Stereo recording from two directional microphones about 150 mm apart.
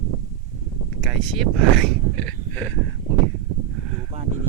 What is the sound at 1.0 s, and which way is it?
Speech, centre (ahead or behind).